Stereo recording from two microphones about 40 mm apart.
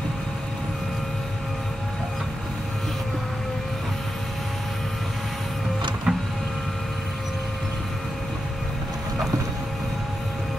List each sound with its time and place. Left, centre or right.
6.1 s printer: right